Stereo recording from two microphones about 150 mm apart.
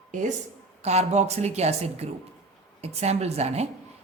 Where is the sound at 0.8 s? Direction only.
45° right (ahead or behind).